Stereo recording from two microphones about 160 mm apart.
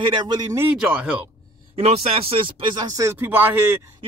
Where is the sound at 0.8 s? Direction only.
5° right (ahead or behind).